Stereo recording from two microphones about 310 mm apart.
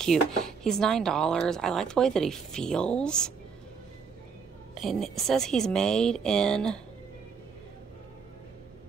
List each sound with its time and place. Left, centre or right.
0.0 s speech: centre
4.7 s speech: centre